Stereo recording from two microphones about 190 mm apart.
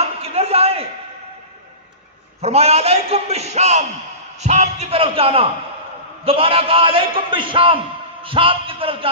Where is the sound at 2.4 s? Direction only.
35° right (ahead or behind).